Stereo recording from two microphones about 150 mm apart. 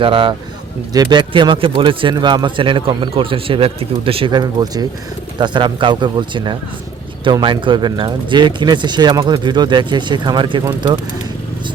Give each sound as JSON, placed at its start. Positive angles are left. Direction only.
{"t": 0.0, "sound": "speech", "side_deg": -35}